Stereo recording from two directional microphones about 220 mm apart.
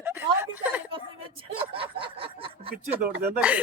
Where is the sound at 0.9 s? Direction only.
25° right (ahead or behind).